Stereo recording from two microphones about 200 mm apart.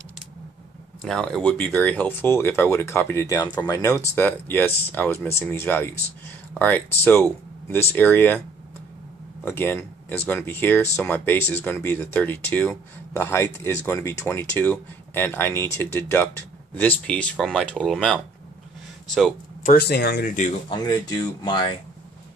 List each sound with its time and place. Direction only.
1.0 s speech: 5° left (ahead or behind)
9.4 s speech: 10° left (ahead or behind)
19.6 s speech: 50° left (ahead or behind)
20.7 s speech: 20° left (ahead or behind)